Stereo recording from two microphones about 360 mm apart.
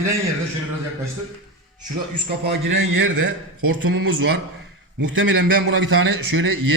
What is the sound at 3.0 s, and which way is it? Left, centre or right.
A man's voice, right.